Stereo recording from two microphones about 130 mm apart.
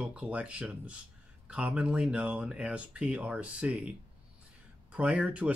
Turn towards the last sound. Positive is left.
turn(degrees=-10)  # may be behind; listen again after turning